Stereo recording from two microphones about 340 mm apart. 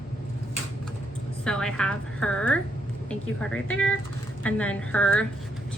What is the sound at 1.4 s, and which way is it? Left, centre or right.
A woman's voice, centre.